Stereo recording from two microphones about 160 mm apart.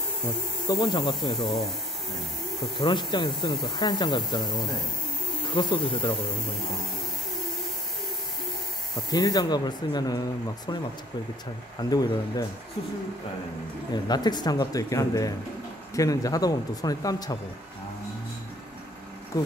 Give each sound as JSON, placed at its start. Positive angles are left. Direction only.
{"t": 0.7, "sound": "speech", "side_deg": 30}
{"t": 2.8, "sound": "speech", "side_deg": 30}
{"t": 8.9, "sound": "speech", "side_deg": 25}
{"t": 11.9, "sound": "speech", "side_deg": 25}
{"t": 13.9, "sound": "speech", "side_deg": 25}
{"t": 19.3, "sound": "speech", "side_deg": 20}